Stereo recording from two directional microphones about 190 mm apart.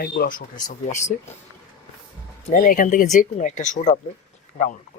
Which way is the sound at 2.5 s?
45° left (ahead or behind).